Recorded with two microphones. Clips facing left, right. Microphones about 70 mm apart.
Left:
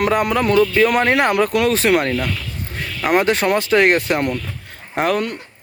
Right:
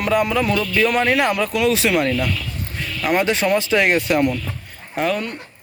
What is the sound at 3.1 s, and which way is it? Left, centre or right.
Speech, left.